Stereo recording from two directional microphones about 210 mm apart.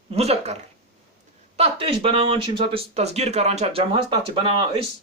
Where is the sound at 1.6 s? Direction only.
25° right (ahead or behind).